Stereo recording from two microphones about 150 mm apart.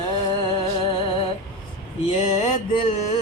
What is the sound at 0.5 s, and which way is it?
Music, 40° left (ahead or behind).